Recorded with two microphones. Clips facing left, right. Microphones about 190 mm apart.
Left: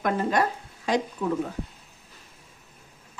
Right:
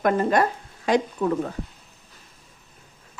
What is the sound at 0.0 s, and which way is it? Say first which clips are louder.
Speech: right 4 dB; 50° right (ahead or behind).